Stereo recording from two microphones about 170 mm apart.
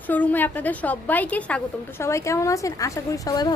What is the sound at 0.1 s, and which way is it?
A woman's voice, 10° left (ahead or behind).